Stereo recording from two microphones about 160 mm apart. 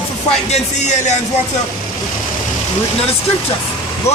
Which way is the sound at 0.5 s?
45° left (ahead or behind).